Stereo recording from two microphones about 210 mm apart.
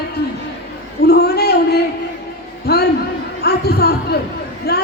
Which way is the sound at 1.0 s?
50° left (ahead or behind).